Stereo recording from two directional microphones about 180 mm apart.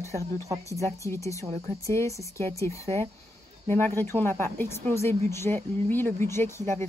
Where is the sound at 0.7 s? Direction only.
15° left (ahead or behind).